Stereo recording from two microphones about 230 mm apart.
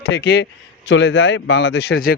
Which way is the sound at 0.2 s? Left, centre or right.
Left.